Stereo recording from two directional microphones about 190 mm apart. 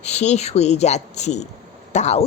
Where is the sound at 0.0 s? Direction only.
35° left (ahead or behind).